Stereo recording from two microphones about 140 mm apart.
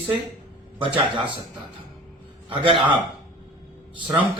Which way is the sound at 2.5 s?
40° right (ahead or behind).